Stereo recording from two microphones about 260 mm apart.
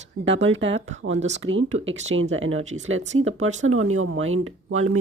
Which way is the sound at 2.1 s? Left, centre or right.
Right.